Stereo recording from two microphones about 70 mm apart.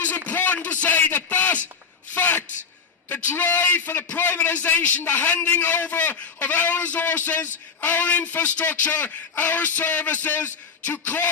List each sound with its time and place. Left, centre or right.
0.3 s a man's voice: left